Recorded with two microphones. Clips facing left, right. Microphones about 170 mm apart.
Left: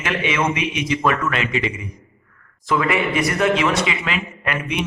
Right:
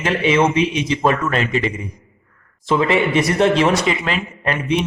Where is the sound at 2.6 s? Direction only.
25° right (ahead or behind).